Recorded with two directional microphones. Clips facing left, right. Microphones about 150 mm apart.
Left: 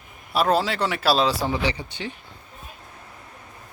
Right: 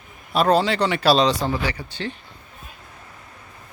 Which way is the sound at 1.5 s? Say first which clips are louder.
Even; 20° left (ahead or behind).